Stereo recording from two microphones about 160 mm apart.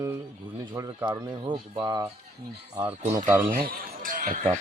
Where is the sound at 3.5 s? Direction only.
60° right (ahead or behind).